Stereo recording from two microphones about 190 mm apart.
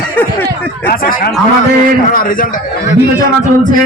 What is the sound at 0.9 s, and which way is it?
A man's voice, 50° left (ahead or behind).